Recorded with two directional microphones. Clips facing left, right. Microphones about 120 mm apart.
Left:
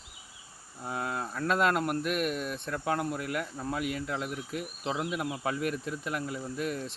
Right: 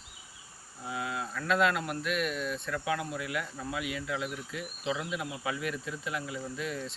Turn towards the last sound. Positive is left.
turn(degrees=50)  # may be behind; listen again after turning